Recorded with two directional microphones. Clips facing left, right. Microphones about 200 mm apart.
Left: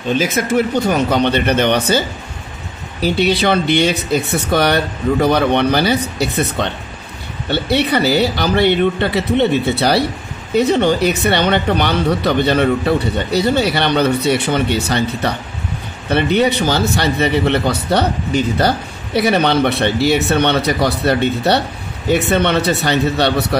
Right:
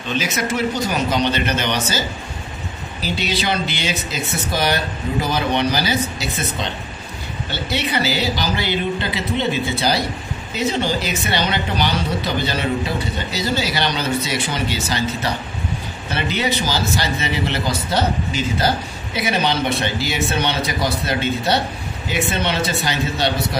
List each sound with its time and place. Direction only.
0.1 s speech: 50° left (ahead or behind)